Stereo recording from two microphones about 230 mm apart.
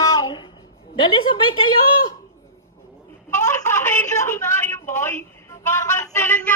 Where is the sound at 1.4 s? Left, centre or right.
Left.